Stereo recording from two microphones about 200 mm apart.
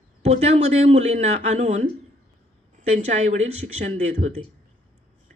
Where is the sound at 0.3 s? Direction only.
35° right (ahead or behind).